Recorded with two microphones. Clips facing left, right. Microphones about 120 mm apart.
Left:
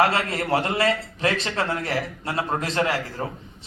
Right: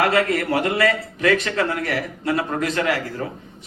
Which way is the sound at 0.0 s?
30° left (ahead or behind).